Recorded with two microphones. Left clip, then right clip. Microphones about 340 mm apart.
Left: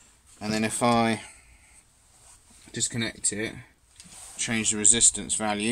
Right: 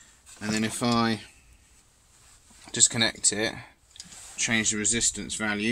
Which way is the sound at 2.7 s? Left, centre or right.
Centre.